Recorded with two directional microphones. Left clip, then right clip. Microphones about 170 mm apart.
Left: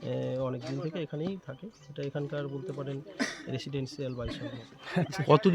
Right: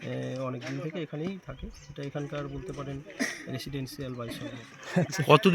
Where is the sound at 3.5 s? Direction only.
30° left (ahead or behind).